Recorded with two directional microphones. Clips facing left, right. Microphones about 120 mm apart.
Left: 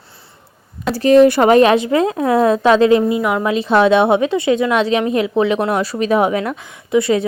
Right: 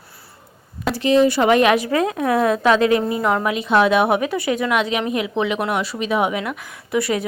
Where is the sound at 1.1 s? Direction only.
55° left (ahead or behind).